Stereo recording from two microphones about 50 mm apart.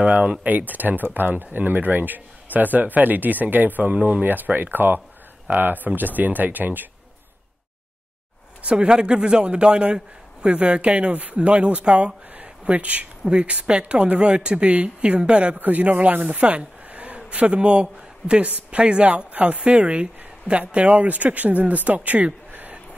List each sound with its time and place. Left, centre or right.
0.0 s speech: right
8.6 s a man's voice: right
15.6 s speech: right